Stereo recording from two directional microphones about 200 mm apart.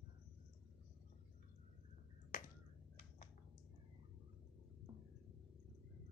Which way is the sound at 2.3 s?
45° left (ahead or behind).